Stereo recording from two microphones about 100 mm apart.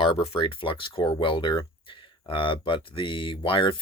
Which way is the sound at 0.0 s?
80° left.